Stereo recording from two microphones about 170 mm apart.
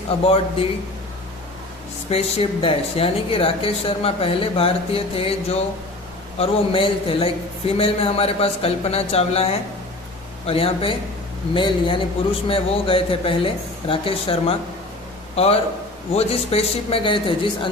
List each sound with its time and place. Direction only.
0.3 s speech: 35° left (ahead or behind)
2.0 s speech: 35° left (ahead or behind)
16.1 s speech: 35° left (ahead or behind)